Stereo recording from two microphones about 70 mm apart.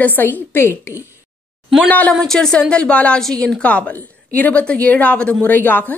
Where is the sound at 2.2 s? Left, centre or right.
Centre.